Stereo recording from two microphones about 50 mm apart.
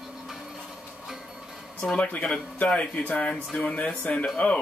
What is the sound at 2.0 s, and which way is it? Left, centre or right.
Speech, left.